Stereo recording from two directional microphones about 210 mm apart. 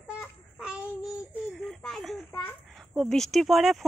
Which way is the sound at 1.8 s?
Centre (ahead or behind).